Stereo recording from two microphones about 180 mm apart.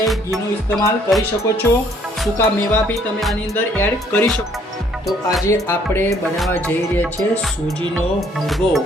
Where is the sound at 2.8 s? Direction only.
5° left (ahead or behind).